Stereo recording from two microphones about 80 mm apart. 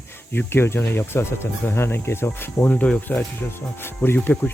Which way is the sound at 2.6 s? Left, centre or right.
Centre.